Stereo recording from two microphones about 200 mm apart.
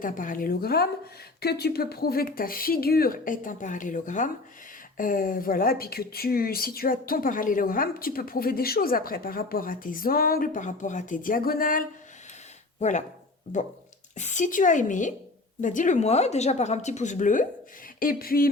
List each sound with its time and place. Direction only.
0.0 s speech: 40° left (ahead or behind)
14.2 s speech: 35° left (ahead or behind)